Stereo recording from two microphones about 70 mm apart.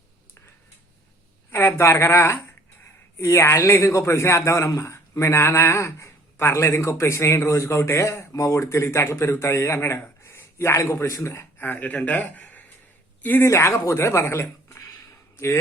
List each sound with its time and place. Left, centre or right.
1.5 s speech: left
11.6 s speech: left
13.4 s speech: left